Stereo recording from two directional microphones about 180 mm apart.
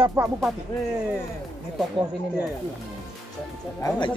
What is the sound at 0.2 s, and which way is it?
Music, 20° right (ahead or behind).